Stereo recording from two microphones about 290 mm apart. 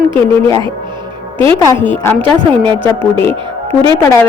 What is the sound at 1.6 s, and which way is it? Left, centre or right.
Speech, centre.